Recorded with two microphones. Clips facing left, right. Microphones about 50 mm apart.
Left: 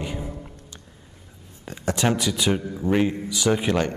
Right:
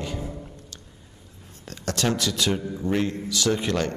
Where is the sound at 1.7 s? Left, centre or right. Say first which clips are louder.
Left 3 dB; centre.